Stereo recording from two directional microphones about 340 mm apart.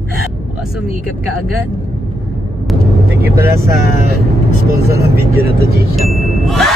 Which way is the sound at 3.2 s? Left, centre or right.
Centre.